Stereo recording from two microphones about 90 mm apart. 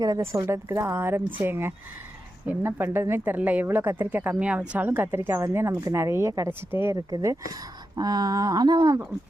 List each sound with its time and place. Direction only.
0.2 s speech: 30° right (ahead or behind)
6.9 s speech: 40° right (ahead or behind)
7.9 s a sound: 45° right (ahead or behind)